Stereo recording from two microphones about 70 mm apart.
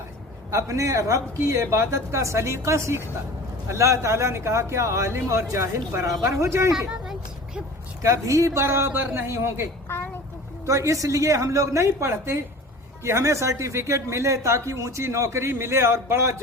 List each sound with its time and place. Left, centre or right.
0.5 s speech: right
6.7 s a sound: centre
8.0 s a man's voice: right
10.7 s speech: right